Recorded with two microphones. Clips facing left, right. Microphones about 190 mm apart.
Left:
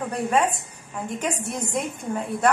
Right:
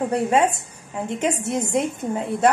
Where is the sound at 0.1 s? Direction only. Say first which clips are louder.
Right 1 dB; 25° right (ahead or behind).